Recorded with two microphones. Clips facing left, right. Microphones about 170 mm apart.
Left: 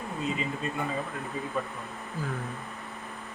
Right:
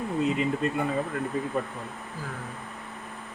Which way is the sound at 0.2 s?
65° right (ahead or behind).